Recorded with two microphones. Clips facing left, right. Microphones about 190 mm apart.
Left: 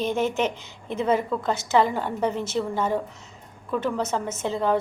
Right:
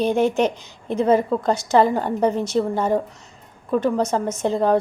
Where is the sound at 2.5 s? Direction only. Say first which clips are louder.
Right 5 dB; 45° right (ahead or behind).